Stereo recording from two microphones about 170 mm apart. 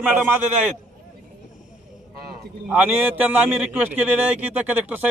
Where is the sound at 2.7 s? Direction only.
10° right (ahead or behind).